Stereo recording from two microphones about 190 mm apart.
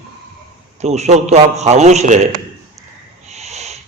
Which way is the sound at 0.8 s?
35° right (ahead or behind).